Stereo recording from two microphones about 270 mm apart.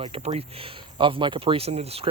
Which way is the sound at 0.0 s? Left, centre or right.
Right.